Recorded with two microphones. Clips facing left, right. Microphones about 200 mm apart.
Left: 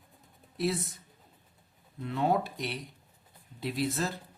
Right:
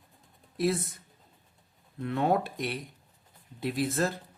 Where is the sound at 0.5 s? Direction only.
50° right (ahead or behind).